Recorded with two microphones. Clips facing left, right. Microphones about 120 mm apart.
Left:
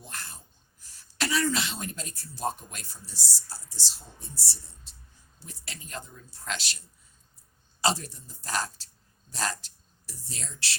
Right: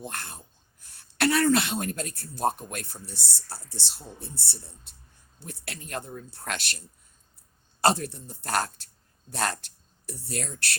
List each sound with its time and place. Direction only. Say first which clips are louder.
0.0 s speech: right 6 dB; 60° right (ahead or behind)
7.8 s speech: right 5 dB; 55° right (ahead or behind)